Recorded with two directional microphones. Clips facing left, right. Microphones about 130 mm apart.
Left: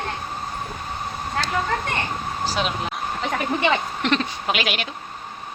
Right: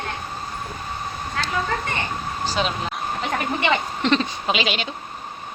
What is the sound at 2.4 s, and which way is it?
Speech, 5° left (ahead or behind).